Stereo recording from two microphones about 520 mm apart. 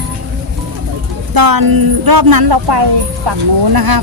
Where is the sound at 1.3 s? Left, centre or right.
Right.